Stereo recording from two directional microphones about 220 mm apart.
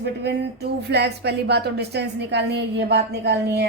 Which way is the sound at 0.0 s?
50° right (ahead or behind).